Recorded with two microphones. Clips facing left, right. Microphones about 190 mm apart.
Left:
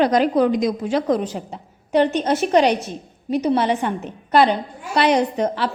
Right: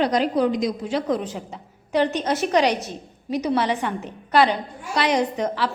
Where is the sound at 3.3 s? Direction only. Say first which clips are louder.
Left 3 dB; 30° left (ahead or behind).